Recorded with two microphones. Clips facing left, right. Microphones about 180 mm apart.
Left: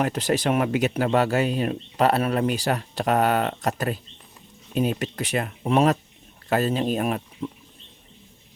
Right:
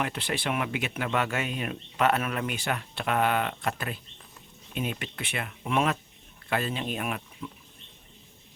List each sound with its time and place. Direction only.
0.0 s speech: 40° left (ahead or behind)